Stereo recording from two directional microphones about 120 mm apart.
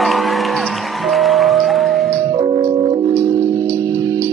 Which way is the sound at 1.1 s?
Centre (ahead or behind).